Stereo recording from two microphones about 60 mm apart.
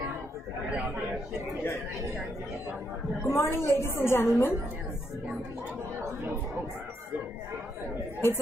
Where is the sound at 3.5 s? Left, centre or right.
Left.